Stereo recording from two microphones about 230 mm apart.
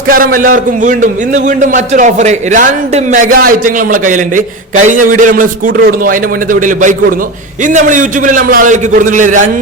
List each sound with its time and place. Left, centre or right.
0.1 s a man's voice: right